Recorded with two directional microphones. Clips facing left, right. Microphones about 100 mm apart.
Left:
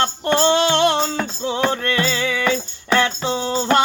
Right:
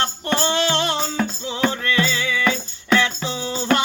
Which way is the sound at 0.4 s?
50° left (ahead or behind).